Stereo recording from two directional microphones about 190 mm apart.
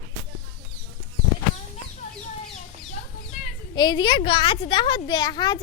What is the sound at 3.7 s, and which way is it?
A woman's voice, 25° left (ahead or behind).